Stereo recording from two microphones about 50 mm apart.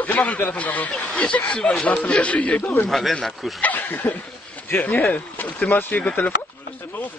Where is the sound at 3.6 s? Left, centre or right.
Left.